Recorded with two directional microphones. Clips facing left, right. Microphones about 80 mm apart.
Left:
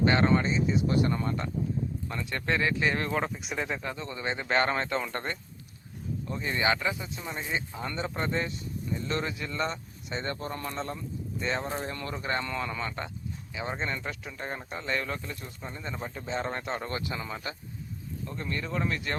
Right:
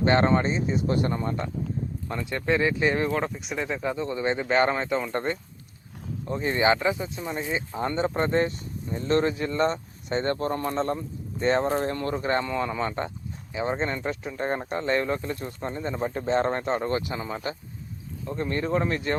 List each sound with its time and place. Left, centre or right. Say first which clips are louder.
0.0 s speech: right 3 dB; right
1.1 s speech: right 2 dB; right
2.6 s speech: right 4 dB; right
3.1 s speech: right 3 dB; centre
3.8 s speech: right 7 dB; centre
4.4 s speech: right 2 dB; centre
6.2 s speech: right 6 dB; right
7.2 s speech: right 4 dB; centre
7.8 s speech: right 7 dB; right
16.1 s speech: right 9 dB; right
16.5 s speech: right 7 dB; right